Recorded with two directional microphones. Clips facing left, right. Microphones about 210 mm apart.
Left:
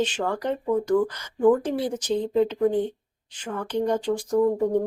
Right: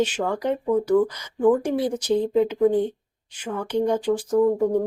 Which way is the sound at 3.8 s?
5° right (ahead or behind).